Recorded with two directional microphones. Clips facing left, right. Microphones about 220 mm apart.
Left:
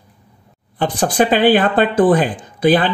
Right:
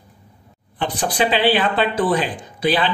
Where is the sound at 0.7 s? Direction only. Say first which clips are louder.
Left 5 dB; 45° left (ahead or behind).